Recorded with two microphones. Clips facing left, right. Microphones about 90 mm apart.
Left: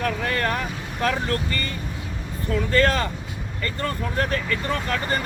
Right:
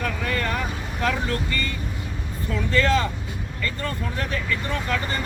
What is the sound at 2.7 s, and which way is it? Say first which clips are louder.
Speech: even; 50° left (ahead or behind).